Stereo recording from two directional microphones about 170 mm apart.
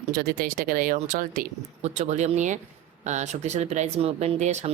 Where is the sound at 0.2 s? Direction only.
60° right (ahead or behind).